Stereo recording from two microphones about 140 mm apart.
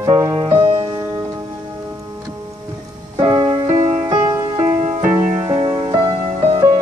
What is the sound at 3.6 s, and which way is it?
Music, 50° right (ahead or behind).